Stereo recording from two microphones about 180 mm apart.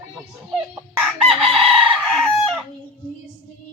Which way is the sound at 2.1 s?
Centre (ahead or behind).